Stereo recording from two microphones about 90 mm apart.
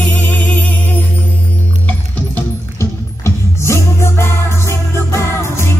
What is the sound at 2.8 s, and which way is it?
Music, 30° left (ahead or behind).